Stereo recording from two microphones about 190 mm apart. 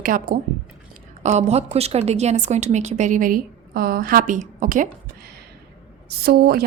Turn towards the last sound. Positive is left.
turn(degrees=-55)  # may be behind; listen again after turning